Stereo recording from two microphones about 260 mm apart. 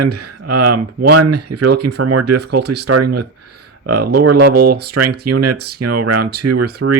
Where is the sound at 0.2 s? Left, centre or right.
Right.